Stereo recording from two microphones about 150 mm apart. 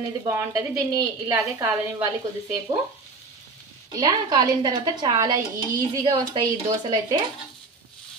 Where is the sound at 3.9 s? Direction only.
25° right (ahead or behind).